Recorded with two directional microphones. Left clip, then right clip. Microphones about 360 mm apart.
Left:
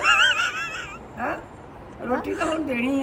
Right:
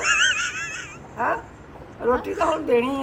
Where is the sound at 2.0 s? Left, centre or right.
Centre.